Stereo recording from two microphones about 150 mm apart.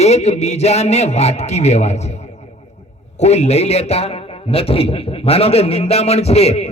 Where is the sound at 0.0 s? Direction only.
45° left (ahead or behind).